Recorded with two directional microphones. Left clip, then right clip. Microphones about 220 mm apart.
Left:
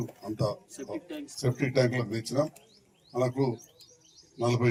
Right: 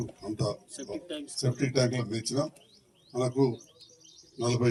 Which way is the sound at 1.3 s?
35° left (ahead or behind).